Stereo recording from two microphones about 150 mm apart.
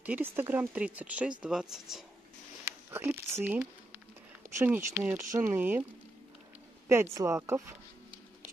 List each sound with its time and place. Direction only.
0.0 s speech: 10° right (ahead or behind)
2.6 s speech: 20° right (ahead or behind)
6.9 s speech: 20° right (ahead or behind)